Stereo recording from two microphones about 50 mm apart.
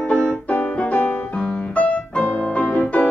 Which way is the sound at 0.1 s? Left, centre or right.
Left.